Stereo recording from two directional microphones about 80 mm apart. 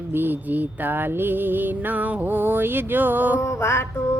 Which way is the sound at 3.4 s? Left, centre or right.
Left.